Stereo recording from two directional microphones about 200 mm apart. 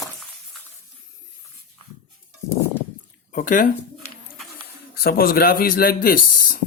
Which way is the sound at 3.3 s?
40° left (ahead or behind).